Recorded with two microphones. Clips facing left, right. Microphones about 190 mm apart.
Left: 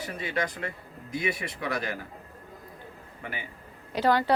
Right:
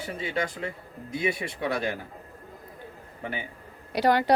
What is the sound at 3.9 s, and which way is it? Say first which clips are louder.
Speech: right 2 dB; 15° right (ahead or behind).